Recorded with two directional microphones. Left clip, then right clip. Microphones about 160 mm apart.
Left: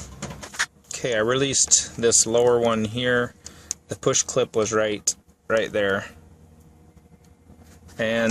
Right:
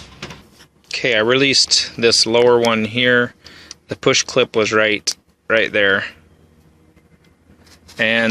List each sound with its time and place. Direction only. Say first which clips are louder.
0.9 s speech: right 9 dB; 20° right (ahead or behind)
7.9 s speech: right 7 dB; 10° right (ahead or behind)